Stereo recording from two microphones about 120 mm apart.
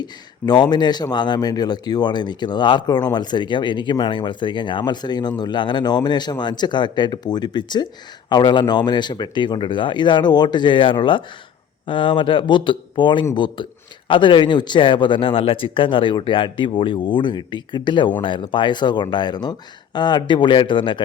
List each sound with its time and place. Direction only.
0.0 s a man's voice: 35° left (ahead or behind)